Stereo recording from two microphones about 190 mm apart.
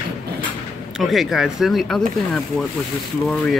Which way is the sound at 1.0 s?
Centre (ahead or behind).